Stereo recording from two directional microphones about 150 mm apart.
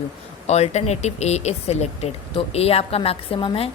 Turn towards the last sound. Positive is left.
turn(degrees=40)  # may be behind; listen again after turning